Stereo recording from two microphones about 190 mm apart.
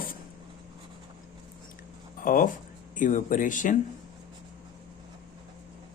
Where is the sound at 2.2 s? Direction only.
45° left (ahead or behind).